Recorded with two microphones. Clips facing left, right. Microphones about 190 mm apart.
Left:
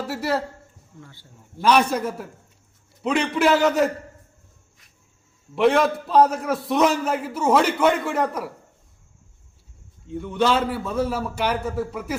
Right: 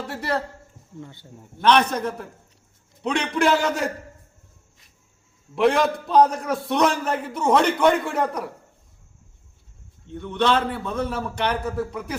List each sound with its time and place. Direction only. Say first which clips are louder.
0.1 s a man's voice: left 2 dB; 5° left (ahead or behind)
1.0 s a man's voice: right 6 dB; 20° right (ahead or behind)
1.6 s a man's voice: even; 10° left (ahead or behind)
5.5 s a man's voice: left 1 dB; centre (ahead or behind)
10.1 s a man's voice: left 1 dB; 5° left (ahead or behind)